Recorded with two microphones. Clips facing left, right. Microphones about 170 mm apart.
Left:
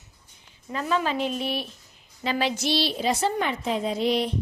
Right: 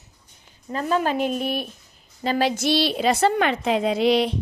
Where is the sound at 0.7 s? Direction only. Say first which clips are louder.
Right 3 dB; 40° right (ahead or behind).